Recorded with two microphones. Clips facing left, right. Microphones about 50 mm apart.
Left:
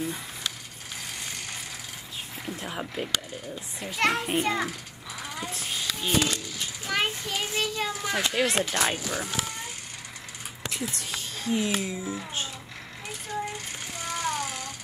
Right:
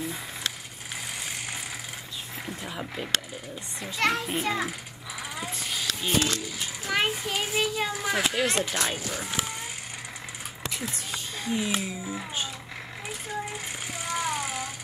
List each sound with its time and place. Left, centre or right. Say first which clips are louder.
2.6 s speech: left 3 dB; centre
4.0 s a child's voice: left 1 dB; centre
6.4 s a child's voice: right 1 dB; centre
10.6 s speech: left 1 dB; centre
14.0 s a sound: even; centre